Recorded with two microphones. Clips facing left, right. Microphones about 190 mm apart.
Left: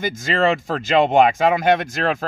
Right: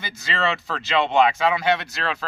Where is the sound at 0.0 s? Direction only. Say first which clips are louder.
Left 7 dB; 45° left (ahead or behind).